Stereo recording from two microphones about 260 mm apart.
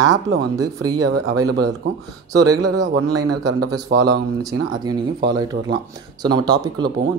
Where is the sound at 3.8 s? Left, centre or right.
Right.